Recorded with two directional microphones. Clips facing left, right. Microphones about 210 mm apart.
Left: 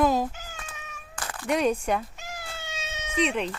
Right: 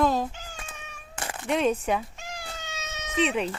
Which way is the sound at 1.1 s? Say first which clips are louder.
Right 2 dB; 25° right (ahead or behind).